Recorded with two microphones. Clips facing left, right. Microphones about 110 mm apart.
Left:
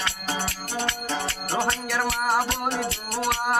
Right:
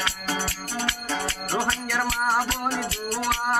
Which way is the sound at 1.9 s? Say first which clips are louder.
Even; 5° left (ahead or behind).